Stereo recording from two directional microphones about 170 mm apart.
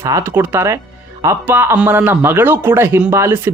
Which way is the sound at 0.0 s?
15° right (ahead or behind).